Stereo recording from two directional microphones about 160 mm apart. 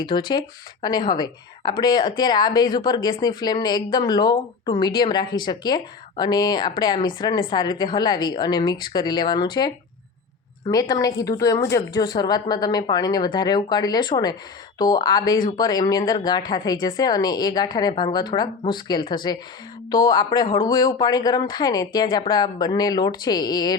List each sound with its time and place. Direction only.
0.3 s a woman's voice: 25° left (ahead or behind)